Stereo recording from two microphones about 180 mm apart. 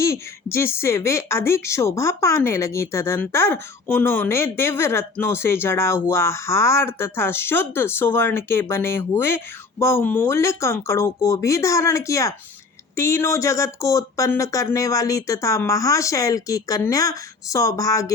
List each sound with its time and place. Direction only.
0.0 s speech: 15° left (ahead or behind)